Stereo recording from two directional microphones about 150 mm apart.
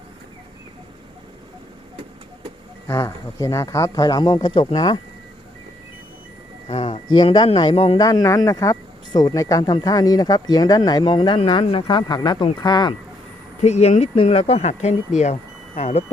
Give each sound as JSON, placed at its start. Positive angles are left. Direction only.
{"t": 2.8, "sound": "speech", "side_deg": 25}
{"t": 6.7, "sound": "speech", "side_deg": 40}
{"t": 7.9, "sound": "speech", "side_deg": 25}
{"t": 13.6, "sound": "speech", "side_deg": 45}